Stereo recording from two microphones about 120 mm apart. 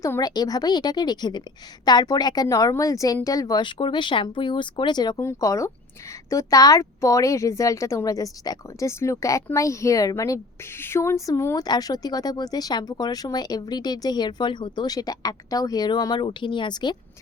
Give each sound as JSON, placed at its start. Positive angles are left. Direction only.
{"t": 0.0, "sound": "speech", "side_deg": 30}